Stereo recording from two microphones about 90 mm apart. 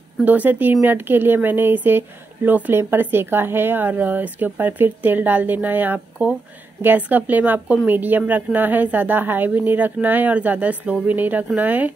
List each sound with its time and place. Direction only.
0.2 s speech: 20° right (ahead or behind)